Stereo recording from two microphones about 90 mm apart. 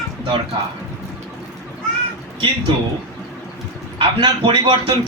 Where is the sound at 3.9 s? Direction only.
70° right (ahead or behind).